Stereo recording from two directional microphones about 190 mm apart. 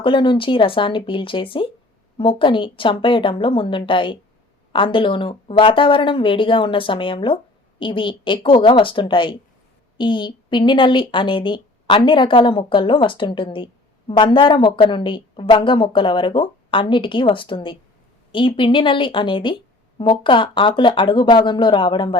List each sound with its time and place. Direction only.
0.0 s a woman's voice: 25° left (ahead or behind)